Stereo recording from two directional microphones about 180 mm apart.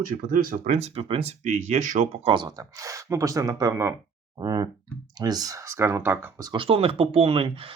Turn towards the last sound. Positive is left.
turn(degrees=-30)  # may be behind; listen again after turning